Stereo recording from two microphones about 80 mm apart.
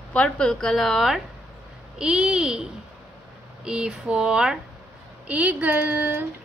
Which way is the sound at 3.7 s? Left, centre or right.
Centre.